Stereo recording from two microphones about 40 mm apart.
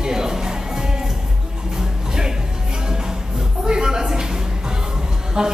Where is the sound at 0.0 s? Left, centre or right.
Centre.